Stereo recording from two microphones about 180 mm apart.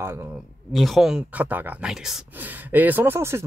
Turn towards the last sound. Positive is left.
turn(degrees=-15)  # may be behind; listen again after turning